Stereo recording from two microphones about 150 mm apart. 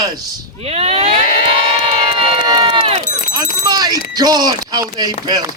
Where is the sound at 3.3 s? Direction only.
25° right (ahead or behind).